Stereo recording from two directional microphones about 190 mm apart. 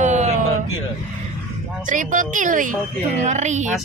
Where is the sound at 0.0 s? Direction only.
40° right (ahead or behind).